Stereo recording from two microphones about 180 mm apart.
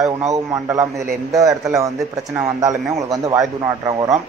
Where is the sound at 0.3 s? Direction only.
15° right (ahead or behind).